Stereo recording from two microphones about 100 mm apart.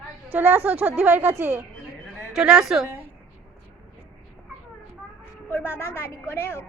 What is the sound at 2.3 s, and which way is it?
Speech, 5° right (ahead or behind).